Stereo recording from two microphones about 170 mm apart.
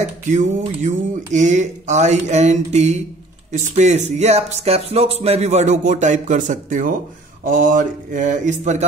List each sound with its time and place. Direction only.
0.0 s speech: 45° right (ahead or behind)